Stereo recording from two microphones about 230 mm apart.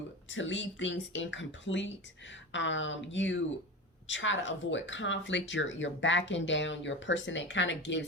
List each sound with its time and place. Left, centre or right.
0.3 s speech: left